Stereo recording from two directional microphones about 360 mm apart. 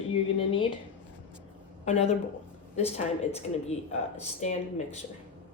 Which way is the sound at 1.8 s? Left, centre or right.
Centre.